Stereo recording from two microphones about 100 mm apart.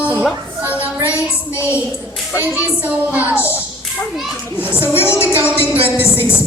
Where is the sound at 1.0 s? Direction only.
30° left (ahead or behind).